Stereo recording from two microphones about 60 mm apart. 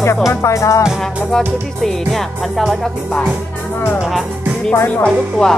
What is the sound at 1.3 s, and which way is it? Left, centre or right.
Speech, centre.